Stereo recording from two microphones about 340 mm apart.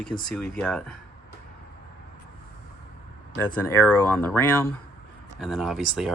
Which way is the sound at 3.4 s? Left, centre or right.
Centre.